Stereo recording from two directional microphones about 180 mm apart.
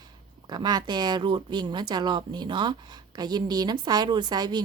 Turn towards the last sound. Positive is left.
turn(degrees=-25)  # may be behind; listen again after turning